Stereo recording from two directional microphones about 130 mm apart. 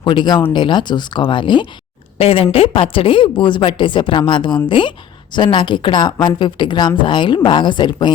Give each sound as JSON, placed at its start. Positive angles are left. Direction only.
{"t": 0.0, "sound": "a woman's voice", "side_deg": 35}
{"t": 2.1, "sound": "a woman's voice", "side_deg": 50}